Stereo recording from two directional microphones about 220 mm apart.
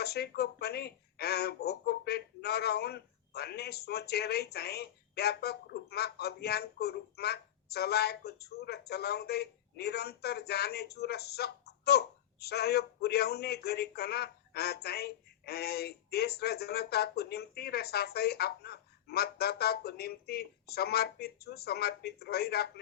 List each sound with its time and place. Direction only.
0.0 s speech: 45° left (ahead or behind)